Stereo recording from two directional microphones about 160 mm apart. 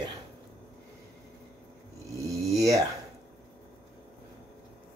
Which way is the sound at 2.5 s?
20° right (ahead or behind).